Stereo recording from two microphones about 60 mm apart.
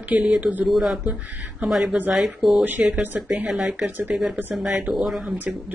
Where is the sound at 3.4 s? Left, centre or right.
Centre.